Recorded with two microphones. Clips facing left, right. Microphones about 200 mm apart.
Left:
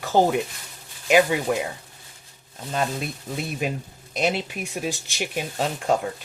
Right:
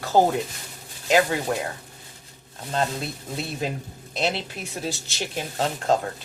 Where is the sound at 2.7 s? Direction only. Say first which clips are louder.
Even; 15° left (ahead or behind).